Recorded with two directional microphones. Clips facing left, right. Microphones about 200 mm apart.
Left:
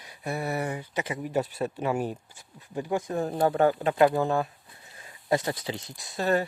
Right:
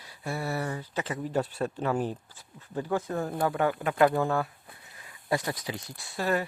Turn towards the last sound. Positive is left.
turn(degrees=25)  # may be behind; listen again after turning